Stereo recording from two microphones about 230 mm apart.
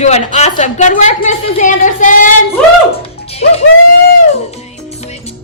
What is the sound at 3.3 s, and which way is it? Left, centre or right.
Music, left.